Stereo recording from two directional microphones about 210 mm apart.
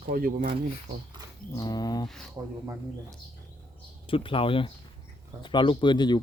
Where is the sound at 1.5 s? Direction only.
20° left (ahead or behind).